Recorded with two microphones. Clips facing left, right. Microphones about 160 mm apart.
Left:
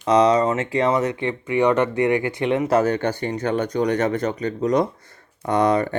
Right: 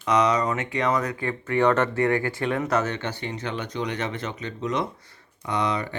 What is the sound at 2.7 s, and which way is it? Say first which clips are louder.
Speech: left 7 dB; 40° left (ahead or behind).